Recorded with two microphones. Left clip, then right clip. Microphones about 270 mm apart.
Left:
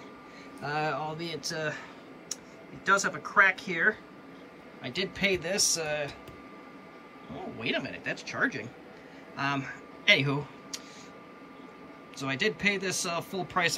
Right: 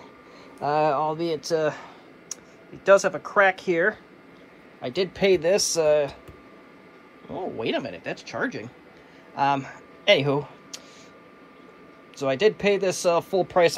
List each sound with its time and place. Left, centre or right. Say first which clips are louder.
0.6 s speech: right 9 dB; centre
7.5 s a man's voice: right 3 dB; centre
12.2 s speech: right 8 dB; centre